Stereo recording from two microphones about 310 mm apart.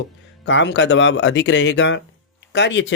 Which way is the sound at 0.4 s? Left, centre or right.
Left.